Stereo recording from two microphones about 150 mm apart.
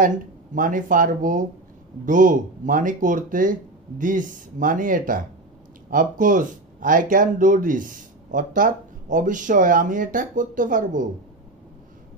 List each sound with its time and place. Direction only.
0.6 s speech: 60° right (ahead or behind)